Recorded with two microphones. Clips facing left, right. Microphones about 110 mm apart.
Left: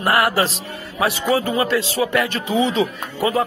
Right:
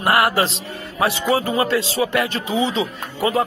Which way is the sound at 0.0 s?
25° right (ahead or behind).